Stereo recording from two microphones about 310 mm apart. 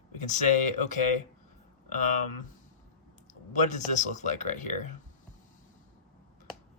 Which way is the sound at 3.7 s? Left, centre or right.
Left.